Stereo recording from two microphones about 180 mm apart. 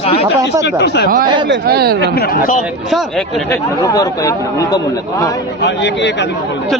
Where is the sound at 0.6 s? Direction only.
70° left (ahead or behind).